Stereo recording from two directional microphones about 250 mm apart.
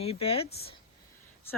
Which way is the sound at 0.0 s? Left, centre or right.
Left.